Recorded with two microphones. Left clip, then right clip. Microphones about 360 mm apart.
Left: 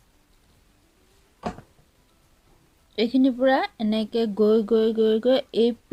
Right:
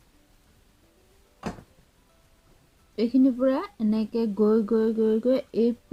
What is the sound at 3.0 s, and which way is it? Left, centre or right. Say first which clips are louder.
Speech: left 2 dB; left.